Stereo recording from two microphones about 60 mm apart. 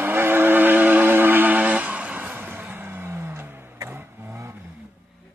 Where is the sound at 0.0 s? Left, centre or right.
Right.